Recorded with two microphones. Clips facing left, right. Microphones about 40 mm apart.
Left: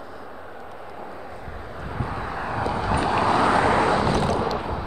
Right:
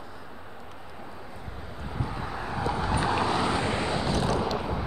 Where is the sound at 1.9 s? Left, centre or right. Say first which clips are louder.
Left 4 dB; left.